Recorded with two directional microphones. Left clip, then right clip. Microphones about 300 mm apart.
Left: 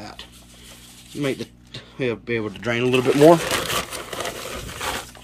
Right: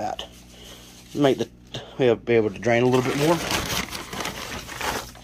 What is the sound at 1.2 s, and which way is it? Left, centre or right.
Speech, centre.